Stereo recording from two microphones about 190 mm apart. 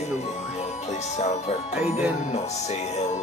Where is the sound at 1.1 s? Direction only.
35° left (ahead or behind).